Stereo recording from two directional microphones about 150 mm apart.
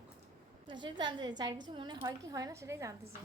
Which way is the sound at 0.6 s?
30° right (ahead or behind).